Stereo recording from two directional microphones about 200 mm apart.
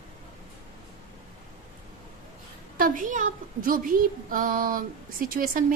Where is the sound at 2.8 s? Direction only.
45° right (ahead or behind).